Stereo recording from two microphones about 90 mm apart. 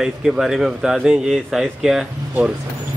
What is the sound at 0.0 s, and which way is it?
Speech, 5° right (ahead or behind).